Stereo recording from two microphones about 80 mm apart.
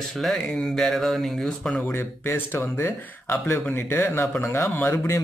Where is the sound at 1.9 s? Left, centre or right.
Left.